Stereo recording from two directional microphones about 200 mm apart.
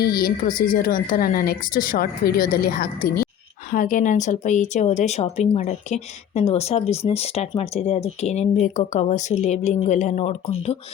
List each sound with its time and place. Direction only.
0.0 s speech: 50° left (ahead or behind); by 10.8 s 35° left (ahead or behind)